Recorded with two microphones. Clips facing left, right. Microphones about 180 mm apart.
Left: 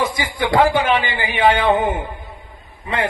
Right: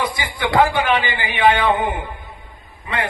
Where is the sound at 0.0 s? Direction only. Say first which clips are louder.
Left 2 dB; 45° left (ahead or behind).